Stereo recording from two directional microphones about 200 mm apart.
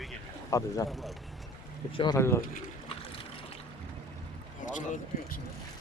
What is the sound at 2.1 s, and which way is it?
Speech, 15° left (ahead or behind).